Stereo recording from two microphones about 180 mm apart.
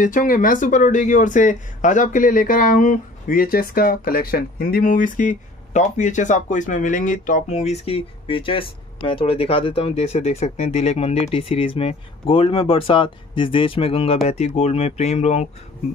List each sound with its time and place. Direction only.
0.0 s speech: 50° left (ahead or behind)